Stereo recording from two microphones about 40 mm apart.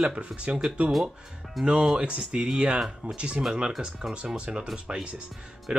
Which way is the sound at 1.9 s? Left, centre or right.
Right.